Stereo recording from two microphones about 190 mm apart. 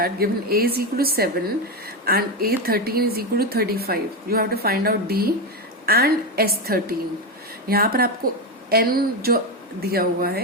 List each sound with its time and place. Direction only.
0.0 s a woman's voice: 50° right (ahead or behind)